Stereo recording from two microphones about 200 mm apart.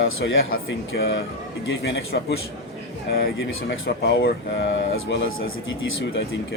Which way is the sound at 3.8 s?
55° left (ahead or behind).